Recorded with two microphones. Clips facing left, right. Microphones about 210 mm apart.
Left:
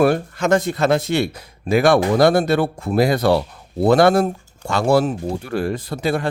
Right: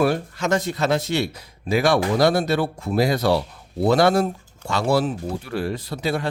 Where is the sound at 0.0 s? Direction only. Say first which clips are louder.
Left 4 dB; 50° left (ahead or behind).